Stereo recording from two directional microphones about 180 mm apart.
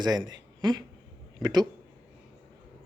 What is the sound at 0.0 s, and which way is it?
Speech, 25° right (ahead or behind).